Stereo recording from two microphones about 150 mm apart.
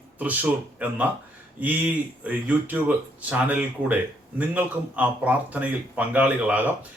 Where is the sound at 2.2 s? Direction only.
10° right (ahead or behind).